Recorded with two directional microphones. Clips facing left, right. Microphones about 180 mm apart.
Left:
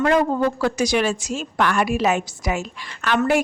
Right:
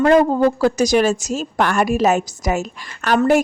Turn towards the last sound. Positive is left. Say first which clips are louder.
# right 4 dB
turn(degrees=-40)  # may be behind; listen again after turning